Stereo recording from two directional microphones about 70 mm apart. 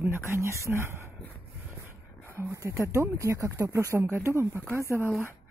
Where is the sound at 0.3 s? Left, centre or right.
Right.